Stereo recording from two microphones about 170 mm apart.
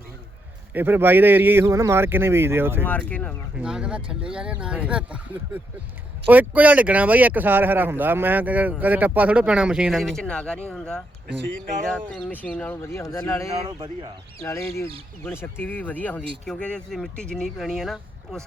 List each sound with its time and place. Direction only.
0.7 s speech: 10° right (ahead or behind)
2.8 s speech: 10° left (ahead or behind)
3.5 s speech: 5° right (ahead or behind); by 13.5 s 15° left (ahead or behind)
13.7 s speech: 25° right (ahead or behind)
14.4 s speech: 15° left (ahead or behind); by 18.4 s centre (ahead or behind)